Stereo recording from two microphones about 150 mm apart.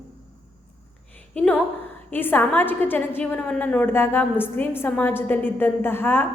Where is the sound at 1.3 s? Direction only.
10° left (ahead or behind).